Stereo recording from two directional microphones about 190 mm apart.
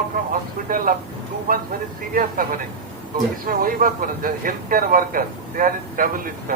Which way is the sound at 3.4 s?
50° right (ahead or behind).